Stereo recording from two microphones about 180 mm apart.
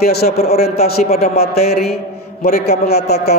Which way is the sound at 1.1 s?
35° left (ahead or behind).